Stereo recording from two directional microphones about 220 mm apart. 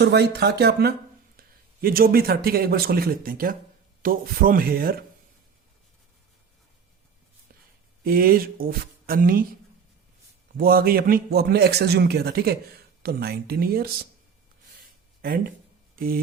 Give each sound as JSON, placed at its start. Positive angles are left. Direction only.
{"t": 0.0, "sound": "a man's voice", "side_deg": -50}
{"t": 8.0, "sound": "speech", "side_deg": -40}
{"t": 10.6, "sound": "a man's voice", "side_deg": -40}
{"t": 16.0, "sound": "speech", "side_deg": -40}